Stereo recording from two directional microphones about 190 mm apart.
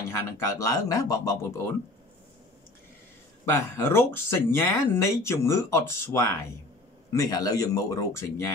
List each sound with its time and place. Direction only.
0.1 s speech: 15° left (ahead or behind)
3.4 s speech: 10° left (ahead or behind)